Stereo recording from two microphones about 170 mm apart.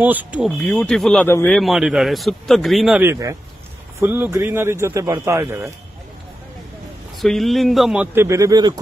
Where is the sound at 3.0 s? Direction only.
15° right (ahead or behind).